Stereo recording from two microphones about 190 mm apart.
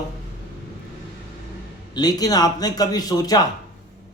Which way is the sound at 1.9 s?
20° left (ahead or behind).